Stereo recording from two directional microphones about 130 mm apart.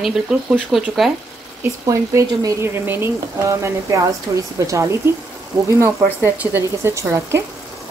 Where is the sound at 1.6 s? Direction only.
25° right (ahead or behind).